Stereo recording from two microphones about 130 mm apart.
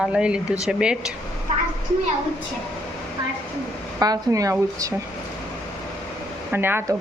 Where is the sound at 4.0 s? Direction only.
25° right (ahead or behind).